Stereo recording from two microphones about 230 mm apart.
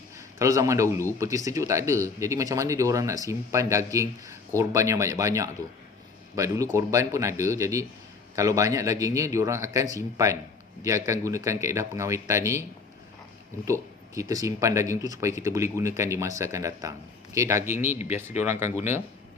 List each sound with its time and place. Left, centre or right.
0.2 s speech: centre
14.1 s speech: centre
18.5 s speech: left